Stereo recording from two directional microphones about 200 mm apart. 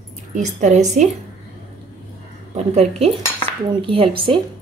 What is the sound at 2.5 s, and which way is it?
A woman's voice, 30° right (ahead or behind).